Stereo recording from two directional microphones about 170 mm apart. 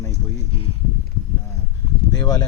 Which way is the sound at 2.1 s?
20° left (ahead or behind).